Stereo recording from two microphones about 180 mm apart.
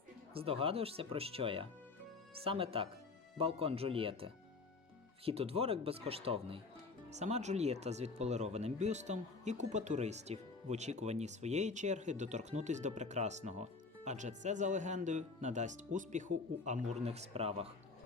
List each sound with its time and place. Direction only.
0.3 s speech: 30° right (ahead or behind)